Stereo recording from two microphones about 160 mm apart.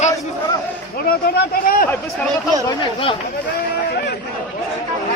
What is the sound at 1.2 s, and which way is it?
Speech, 70° left (ahead or behind).